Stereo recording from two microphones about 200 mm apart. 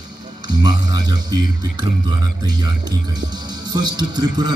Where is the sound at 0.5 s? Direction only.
20° right (ahead or behind).